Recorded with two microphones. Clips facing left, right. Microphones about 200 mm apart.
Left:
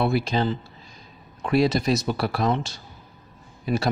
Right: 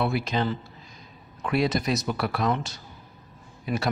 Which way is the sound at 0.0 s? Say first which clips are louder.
Left 3 dB; 30° left (ahead or behind).